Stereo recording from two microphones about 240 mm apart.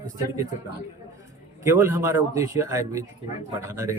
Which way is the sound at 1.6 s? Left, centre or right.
Centre.